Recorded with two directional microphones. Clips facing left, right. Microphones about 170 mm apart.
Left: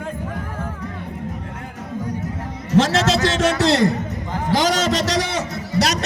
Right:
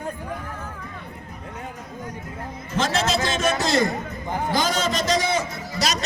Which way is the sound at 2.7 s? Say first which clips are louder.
Left 6 dB; 75° left (ahead or behind).